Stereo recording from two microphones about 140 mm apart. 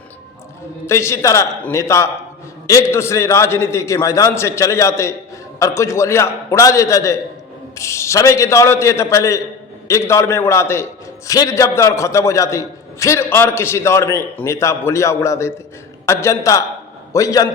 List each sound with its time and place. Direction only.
0.9 s a man's voice: 20° left (ahead or behind)